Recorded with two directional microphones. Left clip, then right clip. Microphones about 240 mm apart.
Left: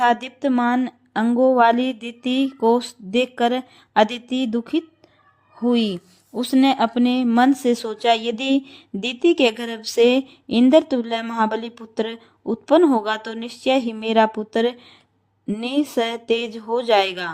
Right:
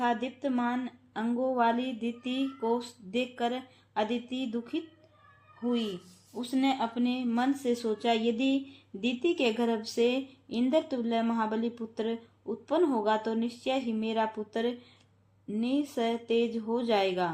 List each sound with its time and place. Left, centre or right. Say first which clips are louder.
0.0 s speech: left 11 dB; left